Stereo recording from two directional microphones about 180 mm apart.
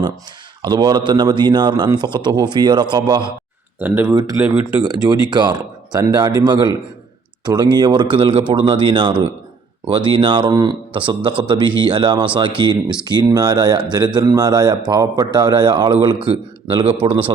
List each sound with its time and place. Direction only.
0.6 s speech: 25° right (ahead or behind)
3.8 s speech: 10° right (ahead or behind)
4.8 s speech: 20° right (ahead or behind)